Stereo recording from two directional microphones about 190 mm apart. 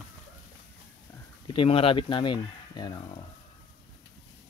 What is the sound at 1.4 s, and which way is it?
Speech, 25° left (ahead or behind).